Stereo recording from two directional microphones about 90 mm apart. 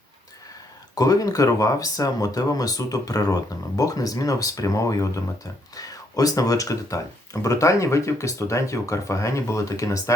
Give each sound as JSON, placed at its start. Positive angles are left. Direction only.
{"t": 0.9, "sound": "speech", "side_deg": 40}